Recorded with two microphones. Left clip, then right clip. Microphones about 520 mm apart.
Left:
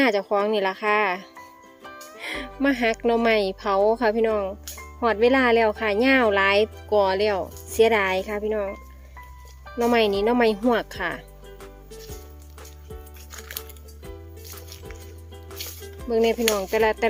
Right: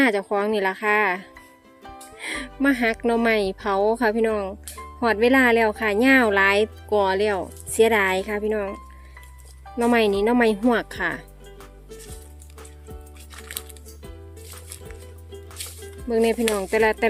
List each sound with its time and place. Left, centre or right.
0.0 s speech: centre
14.4 s music: centre
15.4 s speech: centre